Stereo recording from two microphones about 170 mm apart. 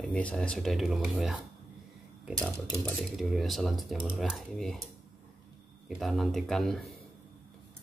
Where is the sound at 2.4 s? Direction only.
Centre (ahead or behind).